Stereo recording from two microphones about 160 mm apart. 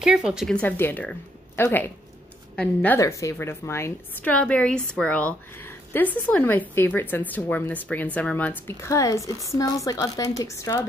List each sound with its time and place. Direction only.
0.0 s speech: 5° right (ahead or behind)
0.6 s a woman's voice: 10° left (ahead or behind)
3.0 s a woman's voice: 20° left (ahead or behind)